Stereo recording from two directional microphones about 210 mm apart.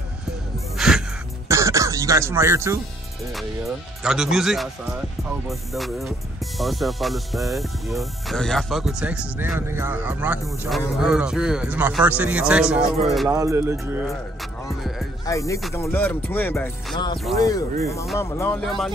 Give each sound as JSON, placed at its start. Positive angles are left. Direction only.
{"t": 0.7, "sound": "music", "side_deg": 0}
{"t": 1.5, "sound": "speech", "side_deg": -15}
{"t": 3.3, "sound": "speech", "side_deg": 0}
{"t": 13.3, "sound": "speech", "side_deg": -15}
{"t": 14.7, "sound": "music", "side_deg": 0}
{"t": 15.2, "sound": "music", "side_deg": 15}
{"t": 16.9, "sound": "speech", "side_deg": 20}
{"t": 18.1, "sound": "music", "side_deg": 10}
{"t": 18.6, "sound": "speech", "side_deg": 0}